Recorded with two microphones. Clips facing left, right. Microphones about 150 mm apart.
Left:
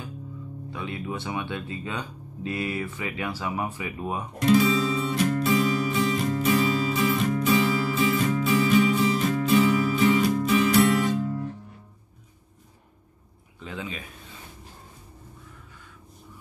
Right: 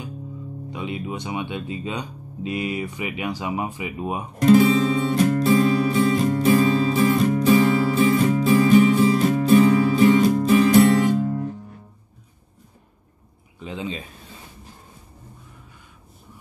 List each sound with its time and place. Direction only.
0.7 s speech: 15° right (ahead or behind)
4.4 s music: 40° right (ahead or behind)
9.6 s music: 45° right (ahead or behind)
13.6 s a sound: 20° right (ahead or behind)